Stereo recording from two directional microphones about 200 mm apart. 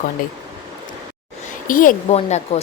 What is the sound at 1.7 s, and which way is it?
Speech, 40° left (ahead or behind).